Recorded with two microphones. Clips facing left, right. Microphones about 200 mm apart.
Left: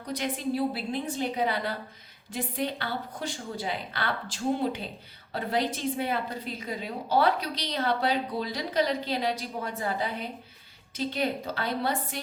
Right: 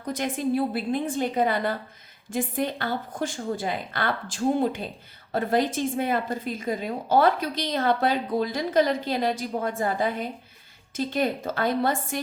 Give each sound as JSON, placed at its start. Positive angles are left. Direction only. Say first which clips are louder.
{"t": 0.0, "sound": "a woman's voice", "louder": "right 4 dB", "side_deg": -50}